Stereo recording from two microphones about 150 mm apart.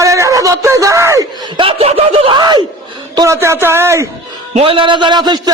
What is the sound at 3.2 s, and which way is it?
Speech, 20° right (ahead or behind).